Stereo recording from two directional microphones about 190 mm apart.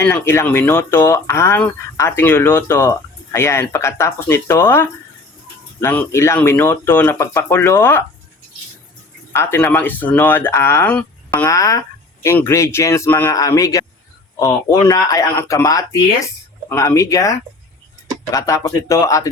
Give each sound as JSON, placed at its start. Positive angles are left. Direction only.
{"t": 0.0, "sound": "speech", "side_deg": 10}
{"t": 9.3, "sound": "speech", "side_deg": 10}